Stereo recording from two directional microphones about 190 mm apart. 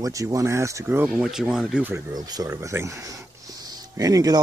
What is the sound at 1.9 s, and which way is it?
Speech, 20° right (ahead or behind).